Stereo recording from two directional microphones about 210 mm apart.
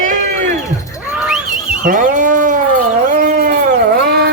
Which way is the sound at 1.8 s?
40° right (ahead or behind).